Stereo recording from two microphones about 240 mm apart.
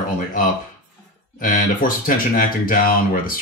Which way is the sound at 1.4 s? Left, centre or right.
Left.